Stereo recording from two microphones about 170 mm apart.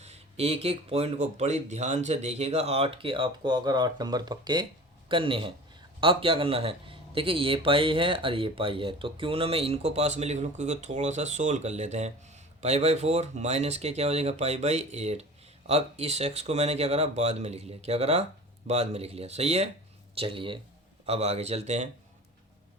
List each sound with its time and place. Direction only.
0.0 s a man's voice: 40° right (ahead or behind)